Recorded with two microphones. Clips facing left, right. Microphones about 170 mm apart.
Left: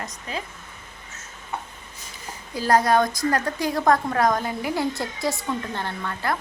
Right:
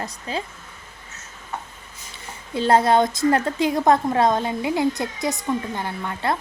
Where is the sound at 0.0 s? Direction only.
30° right (ahead or behind).